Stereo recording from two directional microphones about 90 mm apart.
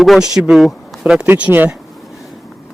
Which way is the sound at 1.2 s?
20° right (ahead or behind).